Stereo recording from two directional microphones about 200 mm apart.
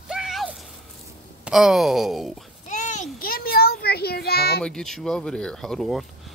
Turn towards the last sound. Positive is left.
turn(degrees=0)  # may be behind; listen again after turning